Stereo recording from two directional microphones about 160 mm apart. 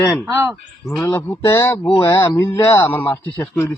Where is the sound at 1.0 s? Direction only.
15° left (ahead or behind).